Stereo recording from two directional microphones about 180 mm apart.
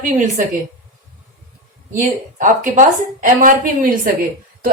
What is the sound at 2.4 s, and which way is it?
A woman's voice, 45° right (ahead or behind).